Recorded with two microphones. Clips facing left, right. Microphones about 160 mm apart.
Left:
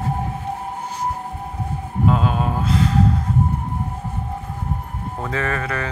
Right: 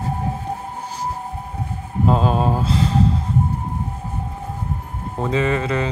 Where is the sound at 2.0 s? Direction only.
35° right (ahead or behind).